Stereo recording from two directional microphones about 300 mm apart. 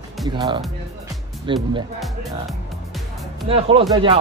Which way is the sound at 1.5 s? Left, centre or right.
Centre.